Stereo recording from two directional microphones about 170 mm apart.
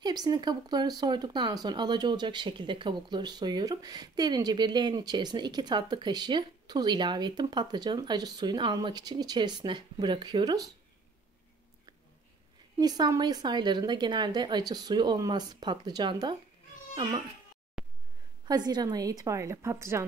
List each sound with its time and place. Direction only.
0.0 s speech: 25° right (ahead or behind)
12.7 s speech: 25° right (ahead or behind)
17.8 s a sound: 5° right (ahead or behind)
18.4 s speech: 25° right (ahead or behind)